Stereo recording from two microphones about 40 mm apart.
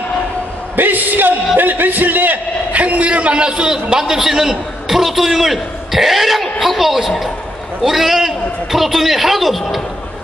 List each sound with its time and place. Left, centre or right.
0.7 s a man's voice: right; by 9.8 s centre